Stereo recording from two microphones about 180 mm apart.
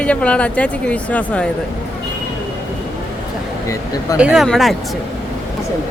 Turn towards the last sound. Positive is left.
turn(degrees=0)  # may be behind; listen again after turning